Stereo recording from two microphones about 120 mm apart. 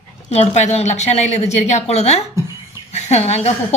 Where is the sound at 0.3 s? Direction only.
65° left (ahead or behind).